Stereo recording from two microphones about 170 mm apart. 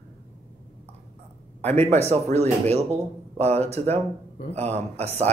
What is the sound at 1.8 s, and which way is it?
Speech, 40° right (ahead or behind).